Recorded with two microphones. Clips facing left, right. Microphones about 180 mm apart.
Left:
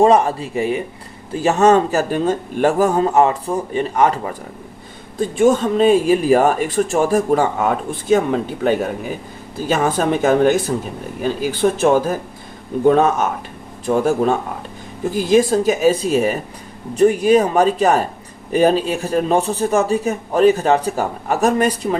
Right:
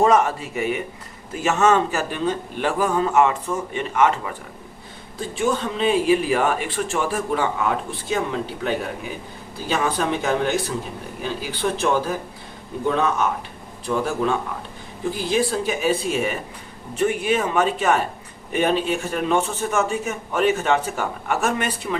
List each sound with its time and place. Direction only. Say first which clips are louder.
0.0 s a man's voice: left 4 dB; 30° left (ahead or behind)
5.4 s a man's voice: left 8 dB; 45° left (ahead or behind)